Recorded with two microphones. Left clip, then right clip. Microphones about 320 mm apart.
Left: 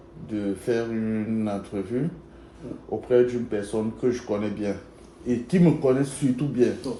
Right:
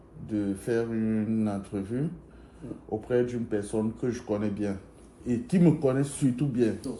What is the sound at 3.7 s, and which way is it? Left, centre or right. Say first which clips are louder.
Speech: left 5 dB; right.